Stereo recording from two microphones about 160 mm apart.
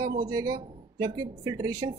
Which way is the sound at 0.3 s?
20° right (ahead or behind).